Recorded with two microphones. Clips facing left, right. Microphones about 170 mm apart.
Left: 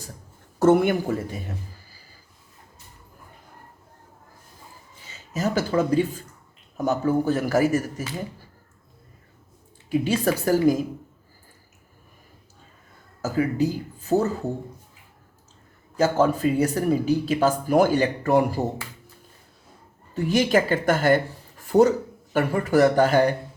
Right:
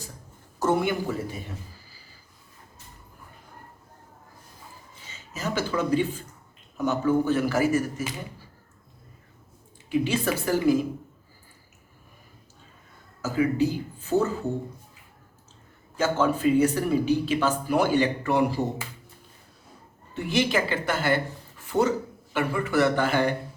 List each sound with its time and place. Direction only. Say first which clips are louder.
0.6 s speech: left 6 dB; 55° left (ahead or behind)
5.1 s a man's voice: left 5 dB; 40° left (ahead or behind)
9.9 s speech: left 3 dB; 40° left (ahead or behind)
13.2 s a man's voice: left 1 dB; 40° left (ahead or behind)
16.0 s speech: left 4 dB; 35° left (ahead or behind)
20.1 s speech: left 4 dB; 45° left (ahead or behind)